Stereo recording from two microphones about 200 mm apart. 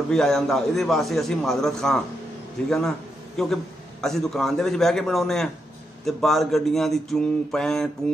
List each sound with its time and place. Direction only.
0.1 s a man's voice: centre (ahead or behind)